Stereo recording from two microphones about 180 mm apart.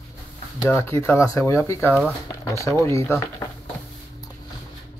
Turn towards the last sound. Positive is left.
turn(degrees=15)  # may be behind; listen again after turning